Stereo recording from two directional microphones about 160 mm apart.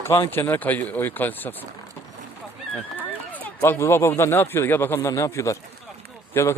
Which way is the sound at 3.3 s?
10° left (ahead or behind).